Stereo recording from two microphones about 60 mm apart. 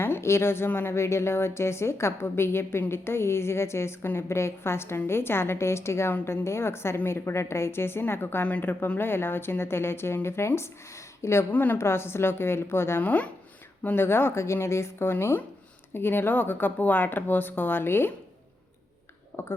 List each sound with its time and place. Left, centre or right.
0.0 s a woman's voice: left
8.4 s speech: left
9.0 s a woman's voice: left
11.5 s speech: left
11.8 s a woman's voice: left
13.0 s speech: left
13.8 s a woman's voice: left
19.3 s speech: left